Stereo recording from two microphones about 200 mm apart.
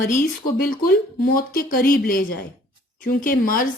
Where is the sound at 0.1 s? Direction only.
45° left (ahead or behind).